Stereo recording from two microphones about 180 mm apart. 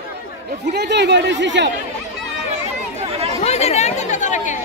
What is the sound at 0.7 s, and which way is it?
Speech, 70° right (ahead or behind).